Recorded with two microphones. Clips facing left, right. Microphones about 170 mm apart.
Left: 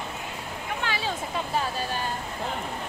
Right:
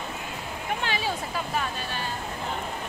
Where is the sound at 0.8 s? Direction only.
20° right (ahead or behind).